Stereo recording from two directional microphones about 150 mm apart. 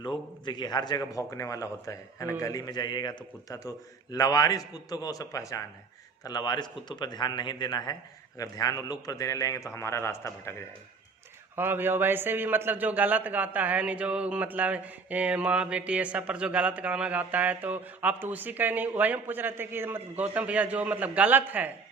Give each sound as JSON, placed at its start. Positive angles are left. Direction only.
{"t": 0.0, "sound": "a man's voice", "side_deg": 30}
{"t": 11.5, "sound": "a man's voice", "side_deg": -15}